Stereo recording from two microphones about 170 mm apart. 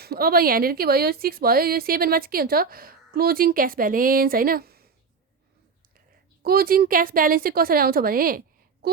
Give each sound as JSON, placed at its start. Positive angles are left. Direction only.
{"t": 0.0, "sound": "a woman's voice", "side_deg": -65}
{"t": 6.4, "sound": "a woman's voice", "side_deg": -60}